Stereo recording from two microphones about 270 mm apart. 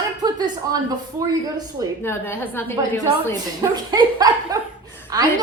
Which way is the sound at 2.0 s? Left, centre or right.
Centre.